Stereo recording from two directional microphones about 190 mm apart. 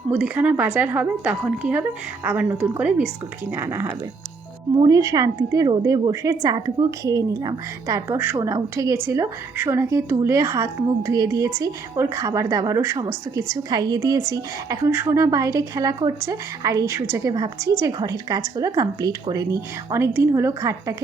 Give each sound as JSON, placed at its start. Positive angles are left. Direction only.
{"t": 0.1, "sound": "a woman's voice", "side_deg": -5}